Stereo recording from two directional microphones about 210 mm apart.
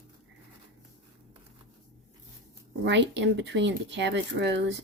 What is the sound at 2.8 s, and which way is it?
Speech, 55° right (ahead or behind).